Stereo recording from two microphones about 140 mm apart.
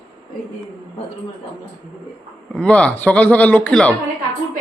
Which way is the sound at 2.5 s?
5° left (ahead or behind).